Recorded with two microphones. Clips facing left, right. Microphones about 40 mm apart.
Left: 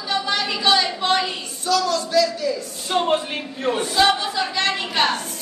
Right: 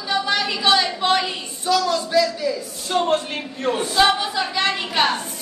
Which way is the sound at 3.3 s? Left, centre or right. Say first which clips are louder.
Even; centre.